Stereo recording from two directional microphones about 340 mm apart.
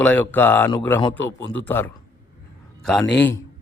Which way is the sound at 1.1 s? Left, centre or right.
Left.